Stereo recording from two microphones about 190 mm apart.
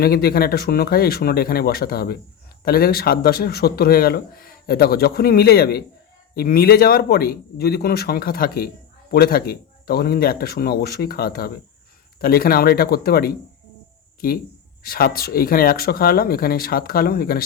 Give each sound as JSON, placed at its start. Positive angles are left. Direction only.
{"t": 0.0, "sound": "speech", "side_deg": 55}
{"t": 14.8, "sound": "speech", "side_deg": 55}